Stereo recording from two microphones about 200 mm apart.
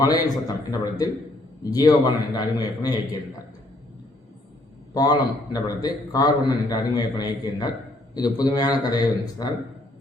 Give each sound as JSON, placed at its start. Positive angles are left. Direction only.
{"t": 0.0, "sound": "a man's voice", "side_deg": 20}
{"t": 4.9, "sound": "a man's voice", "side_deg": 20}